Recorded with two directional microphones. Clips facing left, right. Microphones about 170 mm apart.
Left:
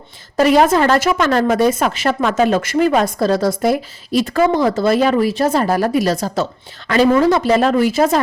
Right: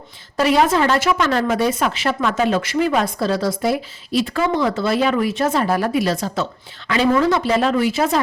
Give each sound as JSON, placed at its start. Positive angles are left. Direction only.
{"t": 0.3, "sound": "a woman's voice", "side_deg": 45}